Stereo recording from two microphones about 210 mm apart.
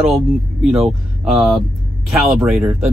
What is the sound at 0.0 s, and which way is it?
Speech, 5° right (ahead or behind).